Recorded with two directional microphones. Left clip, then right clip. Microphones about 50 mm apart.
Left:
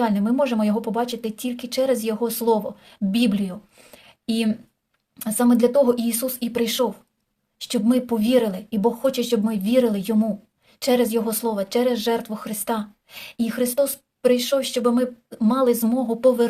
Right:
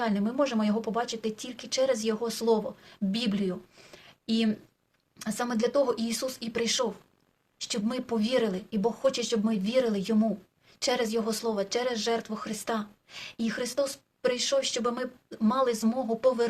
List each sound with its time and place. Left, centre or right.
0.0 s speech: left